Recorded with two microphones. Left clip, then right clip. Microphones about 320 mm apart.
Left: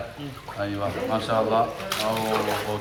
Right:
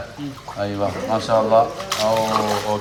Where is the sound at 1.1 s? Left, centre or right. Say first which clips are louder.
Right 7 dB; right.